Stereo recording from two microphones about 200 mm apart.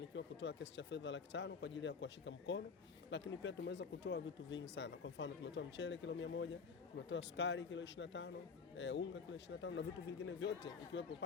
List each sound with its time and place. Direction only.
0.2 s a man's voice: 60° left (ahead or behind)